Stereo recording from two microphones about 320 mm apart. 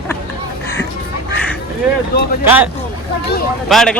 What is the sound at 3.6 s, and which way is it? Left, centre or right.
Speech, centre.